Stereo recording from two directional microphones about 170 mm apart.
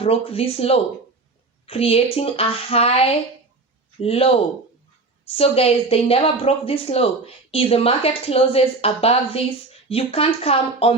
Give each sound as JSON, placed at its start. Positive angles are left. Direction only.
{"t": 0.0, "sound": "a woman's voice", "side_deg": 35}